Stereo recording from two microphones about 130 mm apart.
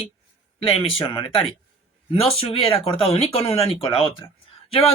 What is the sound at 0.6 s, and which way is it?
A man's voice, 45° left (ahead or behind).